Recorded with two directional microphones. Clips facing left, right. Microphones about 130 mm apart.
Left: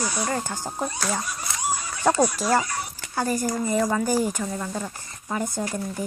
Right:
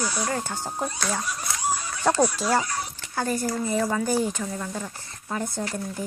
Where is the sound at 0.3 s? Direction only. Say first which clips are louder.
Left 1 dB; 10° left (ahead or behind).